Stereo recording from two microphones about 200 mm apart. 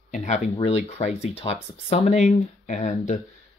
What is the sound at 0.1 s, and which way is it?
Speech, 40° left (ahead or behind).